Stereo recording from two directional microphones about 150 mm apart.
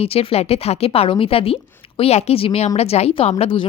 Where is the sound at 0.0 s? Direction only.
40° left (ahead or behind).